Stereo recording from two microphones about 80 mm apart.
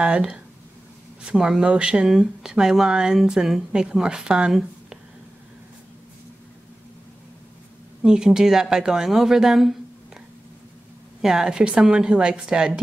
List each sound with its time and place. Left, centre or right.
0.0 s speech: centre
8.0 s speech: centre
11.1 s speech: centre